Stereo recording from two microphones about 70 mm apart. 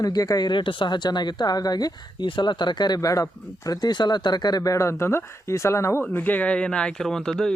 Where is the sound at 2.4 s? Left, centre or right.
Left.